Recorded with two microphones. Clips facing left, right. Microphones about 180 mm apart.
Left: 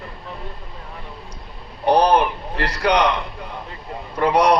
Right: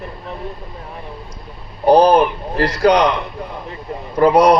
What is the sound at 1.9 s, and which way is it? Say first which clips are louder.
Speech: right 5 dB; 30° right (ahead or behind).